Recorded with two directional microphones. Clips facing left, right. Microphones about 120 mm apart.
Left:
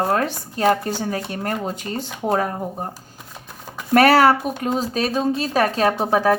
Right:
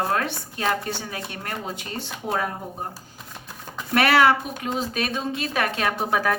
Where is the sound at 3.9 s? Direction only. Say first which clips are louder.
Left 5 dB; 40° left (ahead or behind).